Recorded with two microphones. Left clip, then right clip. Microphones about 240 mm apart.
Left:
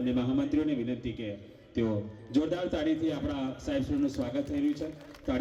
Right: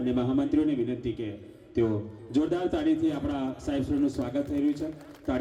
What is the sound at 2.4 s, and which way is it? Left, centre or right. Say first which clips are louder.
A man's voice: right 2 dB; left.